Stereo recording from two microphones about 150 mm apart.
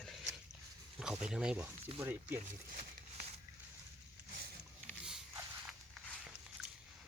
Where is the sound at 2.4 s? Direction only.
55° right (ahead or behind).